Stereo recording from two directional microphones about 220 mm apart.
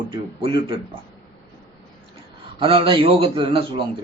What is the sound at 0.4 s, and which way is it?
Speech, 25° right (ahead or behind).